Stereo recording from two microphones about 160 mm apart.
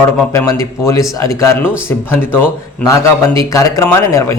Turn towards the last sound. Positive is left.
turn(degrees=15)  # may be behind; listen again after turning